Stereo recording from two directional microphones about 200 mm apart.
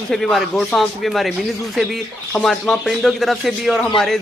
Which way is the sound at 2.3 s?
Centre (ahead or behind).